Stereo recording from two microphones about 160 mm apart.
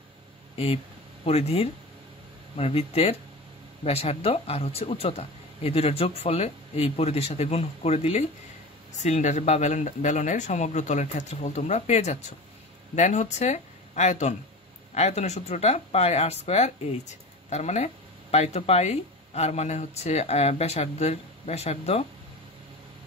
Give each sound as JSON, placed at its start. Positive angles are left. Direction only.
{"t": 1.2, "sound": "speech", "side_deg": 40}